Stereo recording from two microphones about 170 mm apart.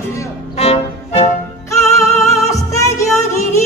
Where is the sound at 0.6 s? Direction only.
35° left (ahead or behind).